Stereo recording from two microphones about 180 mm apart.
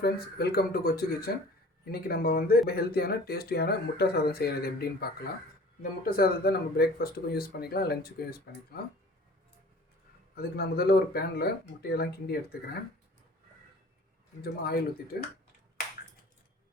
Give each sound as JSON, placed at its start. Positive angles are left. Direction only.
{"t": 0.0, "sound": "speech", "side_deg": 60}
{"t": 6.1, "sound": "speech", "side_deg": 55}
{"t": 10.3, "sound": "speech", "side_deg": 60}
{"t": 14.4, "sound": "speech", "side_deg": 60}